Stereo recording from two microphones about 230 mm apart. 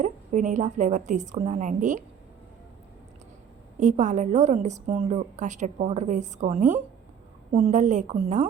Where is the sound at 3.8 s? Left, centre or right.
Right.